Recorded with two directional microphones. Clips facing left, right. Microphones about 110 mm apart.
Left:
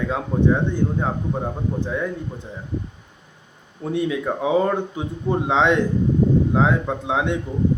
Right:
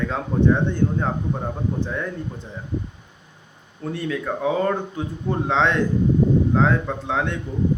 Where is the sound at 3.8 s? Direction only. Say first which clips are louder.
Left 4 dB; 15° left (ahead or behind).